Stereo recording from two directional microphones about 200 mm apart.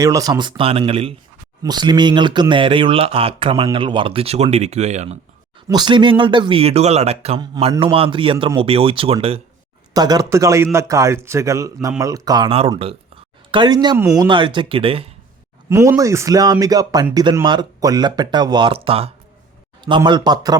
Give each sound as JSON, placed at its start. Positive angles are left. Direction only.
{"t": 0.0, "sound": "speech", "side_deg": -15}
{"t": 5.6, "sound": "a man's voice", "side_deg": -20}
{"t": 15.7, "sound": "a man's voice", "side_deg": -15}